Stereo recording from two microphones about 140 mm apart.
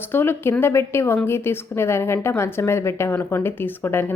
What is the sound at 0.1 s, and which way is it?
A woman's voice, 15° left (ahead or behind).